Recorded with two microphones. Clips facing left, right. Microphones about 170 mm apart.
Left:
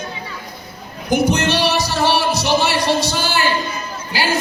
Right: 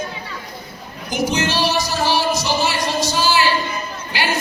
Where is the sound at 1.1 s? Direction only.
65° left (ahead or behind).